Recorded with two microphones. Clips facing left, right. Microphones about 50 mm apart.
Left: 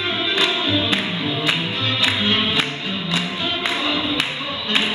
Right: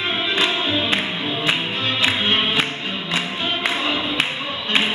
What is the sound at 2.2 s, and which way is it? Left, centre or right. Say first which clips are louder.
Music: even; right.